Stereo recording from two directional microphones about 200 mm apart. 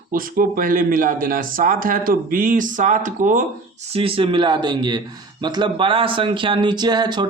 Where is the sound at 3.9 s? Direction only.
30° right (ahead or behind).